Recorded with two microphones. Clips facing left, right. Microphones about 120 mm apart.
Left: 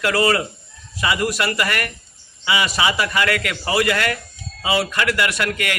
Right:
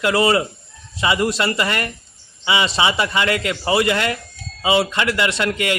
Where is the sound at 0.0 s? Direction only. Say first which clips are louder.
Right 2 dB; 20° right (ahead or behind).